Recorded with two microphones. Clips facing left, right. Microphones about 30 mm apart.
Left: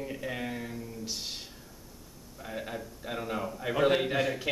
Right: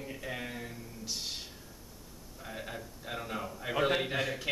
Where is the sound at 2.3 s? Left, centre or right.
Centre.